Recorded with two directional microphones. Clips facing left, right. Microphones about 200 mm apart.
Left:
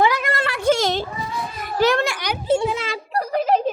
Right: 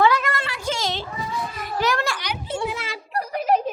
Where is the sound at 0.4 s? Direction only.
55° left (ahead or behind).